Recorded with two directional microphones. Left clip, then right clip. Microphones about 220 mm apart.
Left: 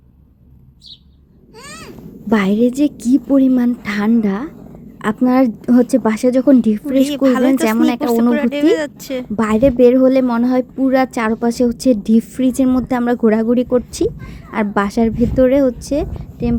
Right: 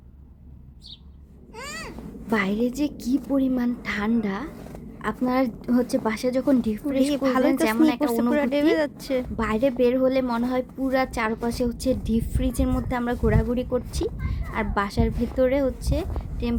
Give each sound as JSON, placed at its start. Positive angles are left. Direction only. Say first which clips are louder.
{"t": 1.6, "sound": "a sound", "louder": "left 1 dB", "side_deg": 30}
{"t": 2.3, "sound": "a woman's voice", "louder": "left 9 dB", "side_deg": 15}
{"t": 7.1, "sound": "a woman's voice", "louder": "left 6 dB", "side_deg": -5}
{"t": 7.5, "sound": "a woman's voice", "louder": "left 7 dB", "side_deg": 15}
{"t": 8.3, "sound": "speech", "louder": "left 4 dB", "side_deg": -5}
{"t": 9.3, "sound": "a woman's voice", "louder": "left 13 dB", "side_deg": 15}